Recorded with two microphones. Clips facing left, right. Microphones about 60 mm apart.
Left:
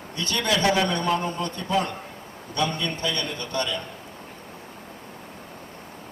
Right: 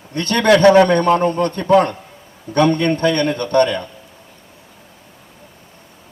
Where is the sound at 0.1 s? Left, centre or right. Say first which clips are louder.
Right 12 dB; right.